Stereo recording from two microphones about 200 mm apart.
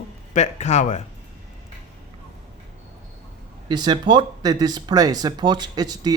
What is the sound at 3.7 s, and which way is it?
Speech, 20° right (ahead or behind).